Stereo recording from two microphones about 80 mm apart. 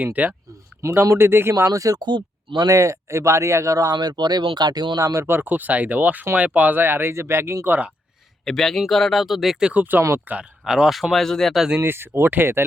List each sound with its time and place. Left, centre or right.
0.0 s speech: right
0.8 s speech: right
2.0 s speech: right
2.6 s speech: right
4.2 s speech: right
4.9 s speech: right
5.2 s speech: right
8.4 s speech: centre
9.7 s speech: right
10.7 s speech: centre
11.8 s speech: right